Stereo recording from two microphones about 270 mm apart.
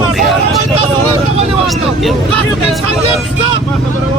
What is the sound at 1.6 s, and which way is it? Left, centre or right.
Vehicle, centre.